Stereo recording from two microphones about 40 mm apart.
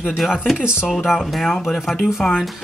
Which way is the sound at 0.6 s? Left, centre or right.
Right.